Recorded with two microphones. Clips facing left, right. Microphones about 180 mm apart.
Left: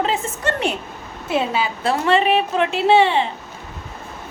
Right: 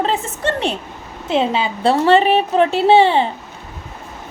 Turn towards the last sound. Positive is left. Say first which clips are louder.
# right 3 dB
turn(degrees=-35)  # may be behind; listen again after turning